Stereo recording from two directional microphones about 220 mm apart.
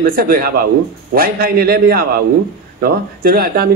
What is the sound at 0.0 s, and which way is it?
A man's voice, 40° right (ahead or behind).